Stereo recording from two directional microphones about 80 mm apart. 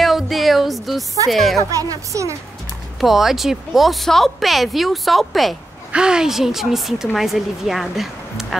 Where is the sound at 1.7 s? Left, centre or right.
Right.